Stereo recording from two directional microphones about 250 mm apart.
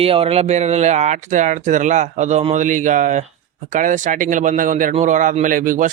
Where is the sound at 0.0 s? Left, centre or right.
Right.